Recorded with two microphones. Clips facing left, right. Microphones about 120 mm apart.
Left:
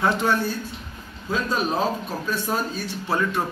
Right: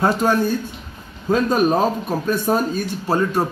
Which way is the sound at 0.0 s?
40° right (ahead or behind).